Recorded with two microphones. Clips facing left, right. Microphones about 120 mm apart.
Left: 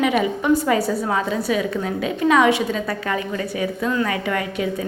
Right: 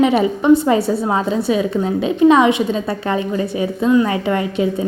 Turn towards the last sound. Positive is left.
turn(degrees=-25)  # may be behind; listen again after turning